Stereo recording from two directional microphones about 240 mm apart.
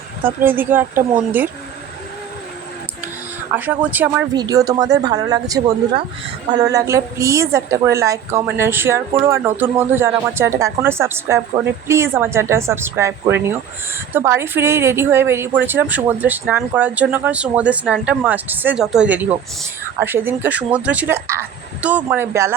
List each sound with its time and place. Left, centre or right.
0.2 s speech: centre
3.5 s speech: centre